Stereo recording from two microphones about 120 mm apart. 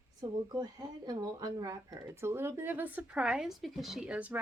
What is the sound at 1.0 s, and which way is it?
Speech, 30° right (ahead or behind).